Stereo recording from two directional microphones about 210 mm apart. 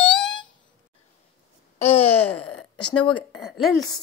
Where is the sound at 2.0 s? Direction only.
10° left (ahead or behind).